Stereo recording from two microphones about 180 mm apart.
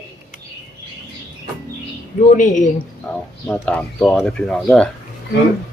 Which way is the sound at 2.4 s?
45° left (ahead or behind).